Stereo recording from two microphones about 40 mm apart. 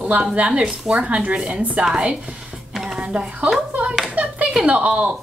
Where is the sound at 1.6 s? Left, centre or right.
Right.